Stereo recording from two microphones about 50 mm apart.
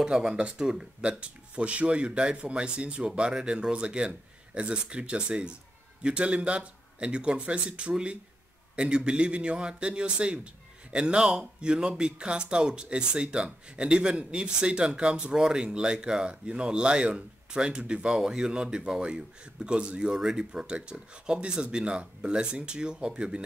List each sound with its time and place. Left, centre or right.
0.0 s a man's voice: centre